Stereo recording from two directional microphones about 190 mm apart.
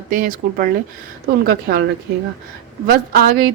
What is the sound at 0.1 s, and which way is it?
Speech, 45° right (ahead or behind).